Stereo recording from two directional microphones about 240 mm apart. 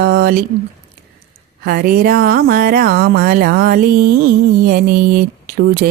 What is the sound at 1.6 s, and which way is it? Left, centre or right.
Music, right.